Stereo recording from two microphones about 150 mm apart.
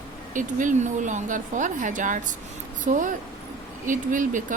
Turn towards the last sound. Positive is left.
turn(degrees=-60)  # may be behind; listen again after turning